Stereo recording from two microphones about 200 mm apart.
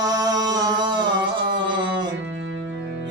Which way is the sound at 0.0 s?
20° right (ahead or behind).